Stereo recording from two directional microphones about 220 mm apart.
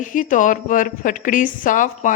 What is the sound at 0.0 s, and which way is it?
A woman's voice, 35° left (ahead or behind).